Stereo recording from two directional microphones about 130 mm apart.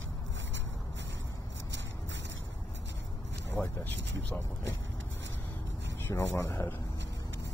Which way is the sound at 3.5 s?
15° left (ahead or behind).